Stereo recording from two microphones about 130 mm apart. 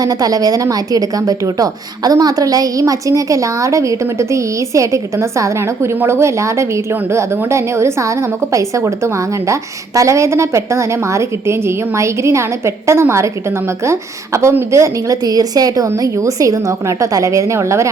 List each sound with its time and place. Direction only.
0.0 s a woman's voice: 30° right (ahead or behind)